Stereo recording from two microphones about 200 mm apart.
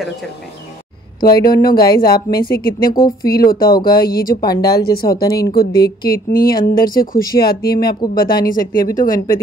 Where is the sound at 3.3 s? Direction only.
50° left (ahead or behind).